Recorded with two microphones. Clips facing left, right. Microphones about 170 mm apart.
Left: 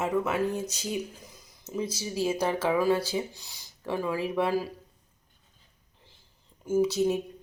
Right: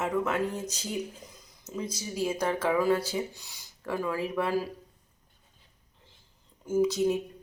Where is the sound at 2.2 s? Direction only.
10° left (ahead or behind).